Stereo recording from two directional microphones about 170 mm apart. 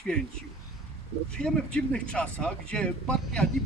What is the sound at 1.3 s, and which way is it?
Speech, 5° left (ahead or behind).